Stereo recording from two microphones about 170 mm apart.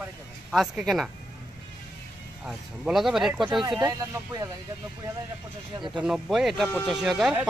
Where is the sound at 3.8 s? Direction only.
20° right (ahead or behind).